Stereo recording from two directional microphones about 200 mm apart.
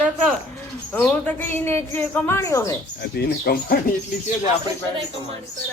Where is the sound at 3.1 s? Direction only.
50° left (ahead or behind).